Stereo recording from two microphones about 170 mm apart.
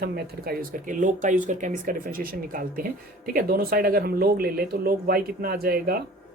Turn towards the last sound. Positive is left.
turn(degrees=-65)  # may be behind; listen again after turning